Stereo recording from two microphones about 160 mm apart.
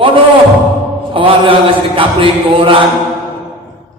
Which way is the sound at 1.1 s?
35° right (ahead or behind).